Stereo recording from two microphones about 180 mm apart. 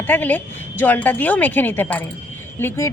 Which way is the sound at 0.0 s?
10° left (ahead or behind).